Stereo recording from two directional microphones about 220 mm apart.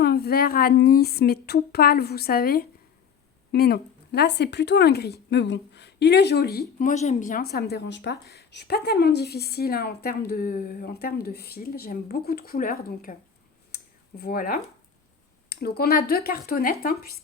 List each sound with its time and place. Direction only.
0.0 s speech: 45° left (ahead or behind)
13.7 s a sound: 45° left (ahead or behind)
15.4 s speech: 45° left (ahead or behind)